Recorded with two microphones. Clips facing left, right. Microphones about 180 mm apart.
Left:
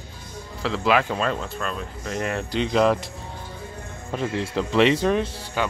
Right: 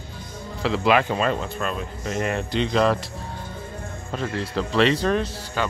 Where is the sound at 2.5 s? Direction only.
10° left (ahead or behind).